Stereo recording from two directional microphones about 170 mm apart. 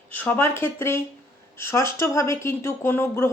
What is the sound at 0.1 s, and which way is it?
Speech, 10° left (ahead or behind).